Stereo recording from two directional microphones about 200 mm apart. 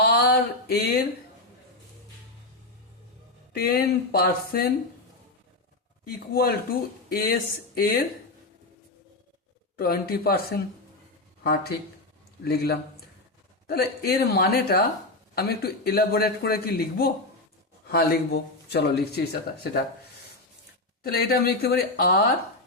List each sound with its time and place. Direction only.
0.0 s a sound: 55° left (ahead or behind)
3.5 s speech: 50° left (ahead or behind)
6.1 s speech: 50° left (ahead or behind)
9.7 s speech: 45° left (ahead or behind)
12.5 s speech: 50° left (ahead or behind)
21.0 s speech: 50° left (ahead or behind)